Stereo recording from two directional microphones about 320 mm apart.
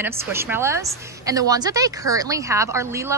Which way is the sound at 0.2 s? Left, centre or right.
Centre.